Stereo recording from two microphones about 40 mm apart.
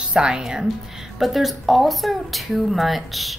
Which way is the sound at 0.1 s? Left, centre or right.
Centre.